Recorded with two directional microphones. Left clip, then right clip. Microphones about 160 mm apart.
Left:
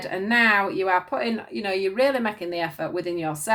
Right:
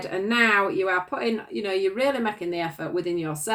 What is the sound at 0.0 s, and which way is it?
Speech, 35° left (ahead or behind).